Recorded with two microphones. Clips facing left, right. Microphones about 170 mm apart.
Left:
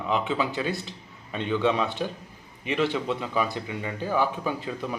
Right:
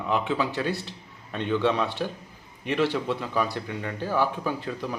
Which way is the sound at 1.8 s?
15° left (ahead or behind).